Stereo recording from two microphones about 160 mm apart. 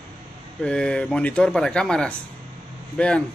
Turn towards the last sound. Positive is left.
turn(degrees=10)  # may be behind; listen again after turning